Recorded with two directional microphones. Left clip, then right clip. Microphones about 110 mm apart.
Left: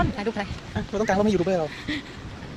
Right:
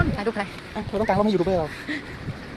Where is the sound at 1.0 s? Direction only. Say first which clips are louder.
Right 1 dB; 70° left (ahead or behind).